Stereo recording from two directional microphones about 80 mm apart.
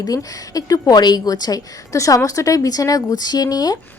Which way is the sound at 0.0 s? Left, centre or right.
Left.